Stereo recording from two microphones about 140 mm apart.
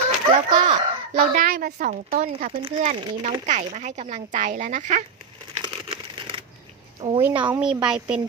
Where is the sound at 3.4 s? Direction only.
60° right (ahead or behind).